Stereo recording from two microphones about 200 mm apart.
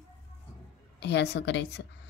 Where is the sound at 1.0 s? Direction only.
60° left (ahead or behind).